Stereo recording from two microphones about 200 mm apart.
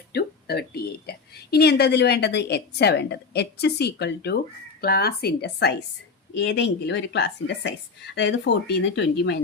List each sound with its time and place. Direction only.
0.1 s a woman's voice: 50° left (ahead or behind)